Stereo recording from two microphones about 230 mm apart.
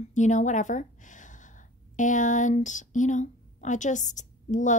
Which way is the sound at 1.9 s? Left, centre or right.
Left.